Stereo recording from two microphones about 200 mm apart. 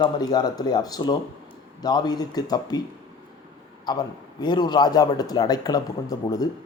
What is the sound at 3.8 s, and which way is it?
A man's voice, 20° left (ahead or behind).